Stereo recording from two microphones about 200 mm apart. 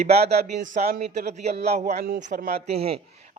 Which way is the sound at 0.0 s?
35° right (ahead or behind).